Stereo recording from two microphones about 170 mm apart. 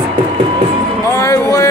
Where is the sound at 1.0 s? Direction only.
20° left (ahead or behind).